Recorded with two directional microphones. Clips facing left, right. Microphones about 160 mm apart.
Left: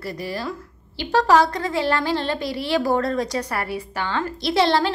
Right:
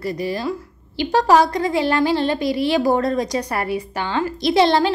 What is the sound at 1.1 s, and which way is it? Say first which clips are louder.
A woman's voice: right 2 dB; 15° right (ahead or behind).